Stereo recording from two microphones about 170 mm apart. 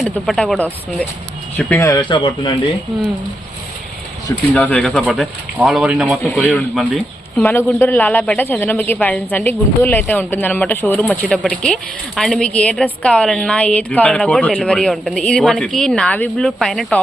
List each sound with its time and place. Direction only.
0.0 s a woman's voice: centre (ahead or behind)
1.5 s speech: 15° left (ahead or behind)
2.9 s a woman's voice: centre (ahead or behind)
4.5 s a woman's voice: 5° left (ahead or behind)
6.2 s a woman's voice: 10° left (ahead or behind)
7.4 s a woman's voice: 15° left (ahead or behind)